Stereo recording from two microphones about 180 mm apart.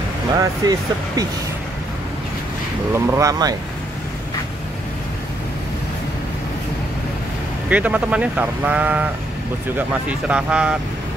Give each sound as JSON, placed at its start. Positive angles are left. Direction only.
{"t": 0.4, "sound": "speech", "side_deg": -20}
{"t": 2.9, "sound": "speech", "side_deg": -15}
{"t": 7.7, "sound": "speech", "side_deg": -5}